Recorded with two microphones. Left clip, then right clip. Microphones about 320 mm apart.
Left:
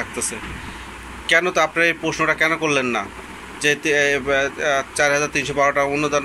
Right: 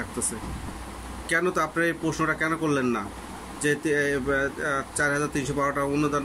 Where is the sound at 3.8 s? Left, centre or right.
Centre.